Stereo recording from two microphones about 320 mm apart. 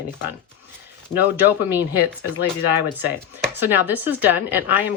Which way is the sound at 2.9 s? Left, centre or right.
Centre.